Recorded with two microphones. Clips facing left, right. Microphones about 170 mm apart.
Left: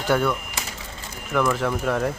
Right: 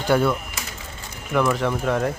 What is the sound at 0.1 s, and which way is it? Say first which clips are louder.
Speech: right 2 dB; 5° right (ahead or behind).